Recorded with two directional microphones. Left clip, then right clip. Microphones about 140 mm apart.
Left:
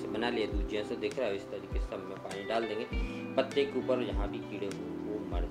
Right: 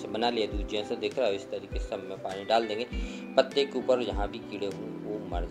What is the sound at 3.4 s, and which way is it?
Speech, 30° right (ahead or behind).